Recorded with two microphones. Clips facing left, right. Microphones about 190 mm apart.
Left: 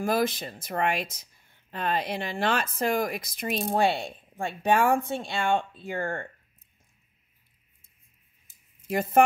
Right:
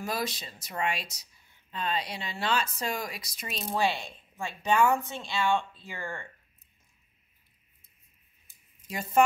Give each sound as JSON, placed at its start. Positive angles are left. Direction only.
{"t": 0.0, "sound": "speech", "side_deg": 55}
{"t": 8.8, "sound": "speech", "side_deg": 55}